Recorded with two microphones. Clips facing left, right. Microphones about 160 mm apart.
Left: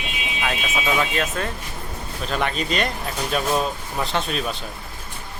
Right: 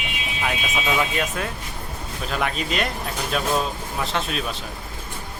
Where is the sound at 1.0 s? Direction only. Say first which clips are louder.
Left 1 dB; 10° right (ahead or behind).